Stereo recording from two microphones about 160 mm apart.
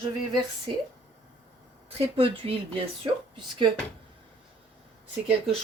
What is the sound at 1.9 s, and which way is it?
Speech, 35° right (ahead or behind).